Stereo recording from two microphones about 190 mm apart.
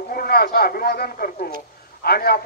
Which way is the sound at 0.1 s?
55° left (ahead or behind).